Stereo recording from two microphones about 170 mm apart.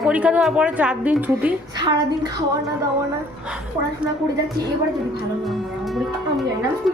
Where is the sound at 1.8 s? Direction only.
25° right (ahead or behind).